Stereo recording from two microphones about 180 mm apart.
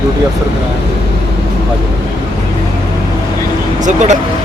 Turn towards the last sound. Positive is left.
turn(degrees=-40)  # may be behind; listen again after turning